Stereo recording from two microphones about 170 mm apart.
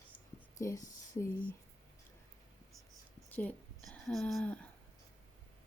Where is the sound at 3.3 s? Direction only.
10° left (ahead or behind).